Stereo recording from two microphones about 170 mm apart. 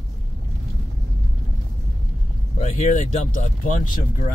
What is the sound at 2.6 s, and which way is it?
Speech, 45° left (ahead or behind).